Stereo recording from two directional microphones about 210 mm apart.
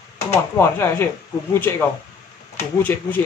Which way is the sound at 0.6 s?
10° left (ahead or behind).